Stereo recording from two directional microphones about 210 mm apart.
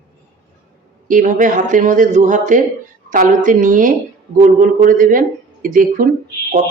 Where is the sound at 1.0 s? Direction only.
40° right (ahead or behind).